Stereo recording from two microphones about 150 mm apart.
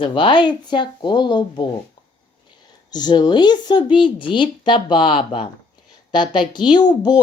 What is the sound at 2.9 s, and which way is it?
A woman's voice, 30° left (ahead or behind).